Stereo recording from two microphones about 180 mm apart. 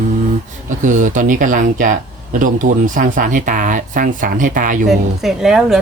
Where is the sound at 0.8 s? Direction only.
45° right (ahead or behind).